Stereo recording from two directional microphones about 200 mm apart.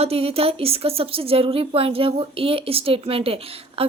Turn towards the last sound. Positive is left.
turn(degrees=-30)  # may be behind; listen again after turning